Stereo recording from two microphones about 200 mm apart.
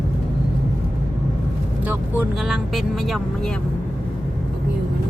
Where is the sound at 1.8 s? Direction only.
10° right (ahead or behind).